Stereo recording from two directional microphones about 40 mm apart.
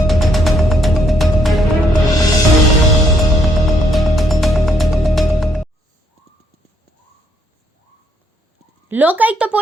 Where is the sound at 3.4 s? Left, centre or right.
Centre.